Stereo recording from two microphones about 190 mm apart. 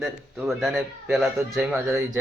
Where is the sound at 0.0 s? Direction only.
Centre (ahead or behind).